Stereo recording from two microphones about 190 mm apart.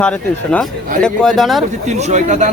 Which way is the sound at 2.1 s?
40° right (ahead or behind).